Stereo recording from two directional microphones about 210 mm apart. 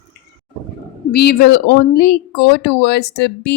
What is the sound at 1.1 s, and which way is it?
Speech, 50° left (ahead or behind).